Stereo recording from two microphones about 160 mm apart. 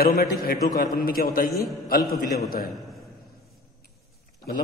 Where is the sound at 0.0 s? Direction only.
70° left (ahead or behind).